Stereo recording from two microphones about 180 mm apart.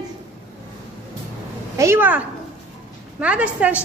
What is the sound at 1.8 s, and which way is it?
A woman's voice, 10° right (ahead or behind).